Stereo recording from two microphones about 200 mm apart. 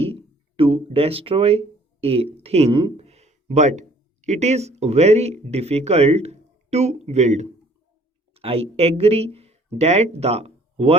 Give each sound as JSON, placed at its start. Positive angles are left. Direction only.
{"t": 0.0, "sound": "speech", "side_deg": -30}